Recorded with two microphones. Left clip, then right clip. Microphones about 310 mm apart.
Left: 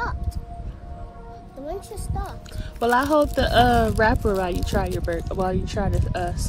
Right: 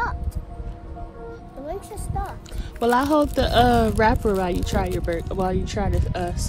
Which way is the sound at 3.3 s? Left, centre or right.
Right.